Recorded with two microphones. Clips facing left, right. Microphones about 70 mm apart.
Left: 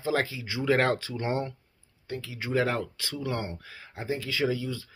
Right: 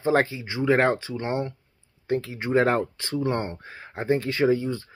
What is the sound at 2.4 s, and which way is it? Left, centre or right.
Speech, right.